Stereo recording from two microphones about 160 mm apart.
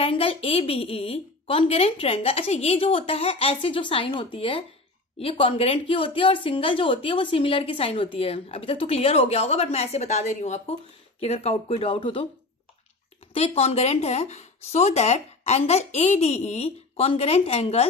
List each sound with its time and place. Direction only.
0.0 s speech: 35° left (ahead or behind)
13.3 s speech: 40° left (ahead or behind)